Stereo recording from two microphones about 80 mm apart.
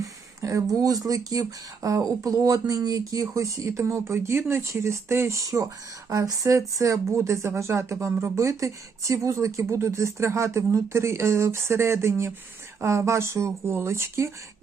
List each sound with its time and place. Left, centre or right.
0.0 s speech: right